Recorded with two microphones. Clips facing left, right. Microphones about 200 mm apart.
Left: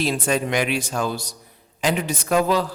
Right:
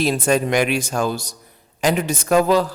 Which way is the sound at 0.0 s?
45° right (ahead or behind).